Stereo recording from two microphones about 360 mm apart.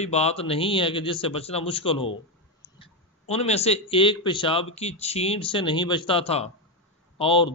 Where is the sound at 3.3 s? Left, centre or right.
Centre.